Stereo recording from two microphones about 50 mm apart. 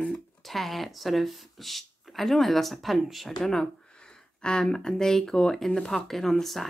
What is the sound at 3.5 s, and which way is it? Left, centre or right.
Speech, centre.